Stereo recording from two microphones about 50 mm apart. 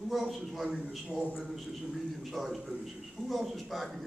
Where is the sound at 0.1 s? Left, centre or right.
Centre.